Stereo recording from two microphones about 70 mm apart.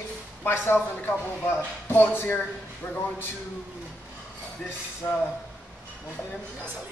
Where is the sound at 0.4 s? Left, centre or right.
Left.